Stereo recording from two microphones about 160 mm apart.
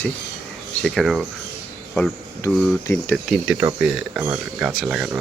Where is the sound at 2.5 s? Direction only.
5° left (ahead or behind).